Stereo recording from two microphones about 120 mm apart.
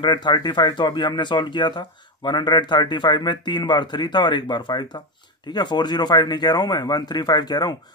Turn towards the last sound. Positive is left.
turn(degrees=35)  # may be behind; listen again after turning